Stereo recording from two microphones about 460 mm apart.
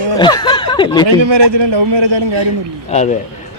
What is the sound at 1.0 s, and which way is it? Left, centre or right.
A man's voice, right.